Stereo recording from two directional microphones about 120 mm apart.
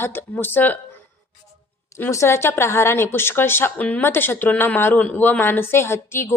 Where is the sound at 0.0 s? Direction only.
20° left (ahead or behind).